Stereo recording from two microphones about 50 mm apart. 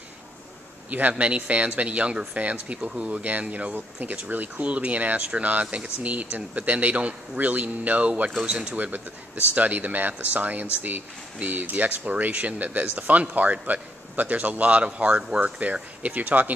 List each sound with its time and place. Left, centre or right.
0.8 s speech: right